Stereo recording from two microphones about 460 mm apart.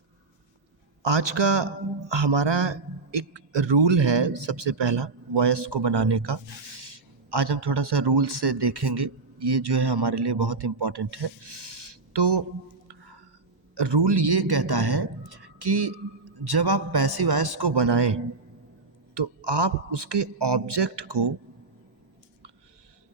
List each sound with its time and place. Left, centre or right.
1.0 s a man's voice: right
13.7 s a man's voice: right